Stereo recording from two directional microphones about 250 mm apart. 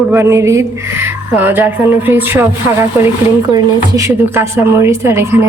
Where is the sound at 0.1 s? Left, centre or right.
Centre.